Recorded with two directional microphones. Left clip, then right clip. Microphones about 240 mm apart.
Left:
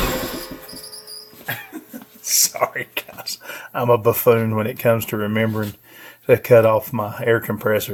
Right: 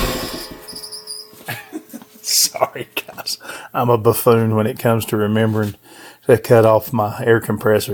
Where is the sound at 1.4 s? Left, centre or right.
Right.